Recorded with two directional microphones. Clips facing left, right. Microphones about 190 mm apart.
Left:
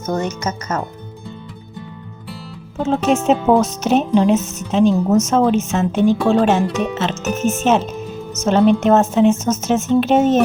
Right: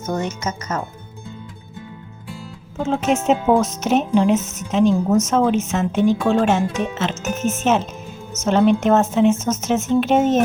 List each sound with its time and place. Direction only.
0.4 s speech: 40° left (ahead or behind)
2.7 s speech: 35° left (ahead or behind)